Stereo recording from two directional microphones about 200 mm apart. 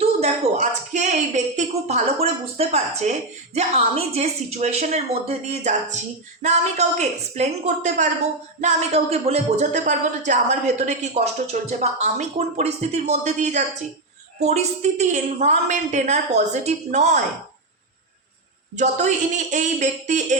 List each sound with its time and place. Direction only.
0.0 s speech: 35° right (ahead or behind)
18.8 s speech: 35° right (ahead or behind)